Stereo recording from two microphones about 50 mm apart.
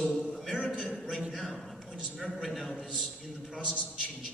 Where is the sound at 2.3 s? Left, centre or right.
Centre.